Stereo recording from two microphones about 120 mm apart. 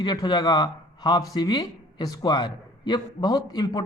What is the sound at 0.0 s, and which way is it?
A man's voice, 35° left (ahead or behind).